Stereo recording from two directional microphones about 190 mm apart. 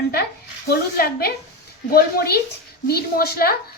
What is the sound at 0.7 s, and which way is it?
A woman's voice, 55° left (ahead or behind).